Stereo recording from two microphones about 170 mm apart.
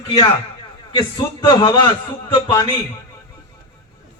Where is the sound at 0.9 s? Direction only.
25° left (ahead or behind).